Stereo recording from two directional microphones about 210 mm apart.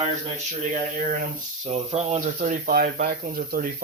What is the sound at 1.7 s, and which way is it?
Speech, 30° right (ahead or behind).